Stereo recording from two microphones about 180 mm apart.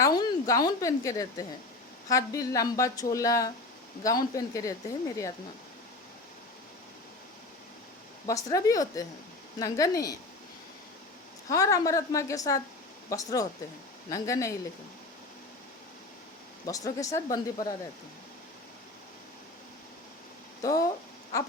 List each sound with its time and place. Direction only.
0.0 s a woman's voice: 20° left (ahead or behind)
8.3 s speech: 20° left (ahead or behind)
11.4 s speech: 20° left (ahead or behind)
16.6 s speech: 20° left (ahead or behind)
20.6 s speech: 20° left (ahead or behind)